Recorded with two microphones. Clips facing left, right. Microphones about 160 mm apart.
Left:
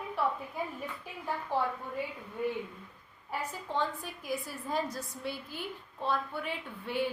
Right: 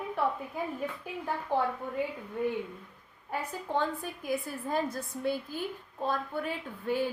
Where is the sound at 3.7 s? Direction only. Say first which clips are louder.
Right 3 dB; 55° right (ahead or behind).